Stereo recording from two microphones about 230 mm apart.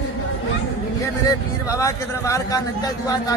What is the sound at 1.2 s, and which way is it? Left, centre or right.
Speech, centre.